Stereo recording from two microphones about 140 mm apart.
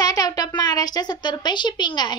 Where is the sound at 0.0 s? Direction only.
25° left (ahead or behind).